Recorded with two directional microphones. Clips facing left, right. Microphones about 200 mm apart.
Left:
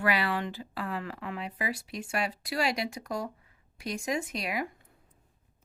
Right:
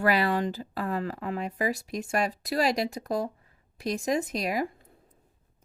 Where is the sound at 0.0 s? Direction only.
40° right (ahead or behind).